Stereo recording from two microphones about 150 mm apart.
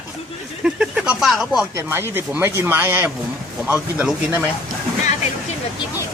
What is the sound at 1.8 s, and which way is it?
Speech, 15° right (ahead or behind).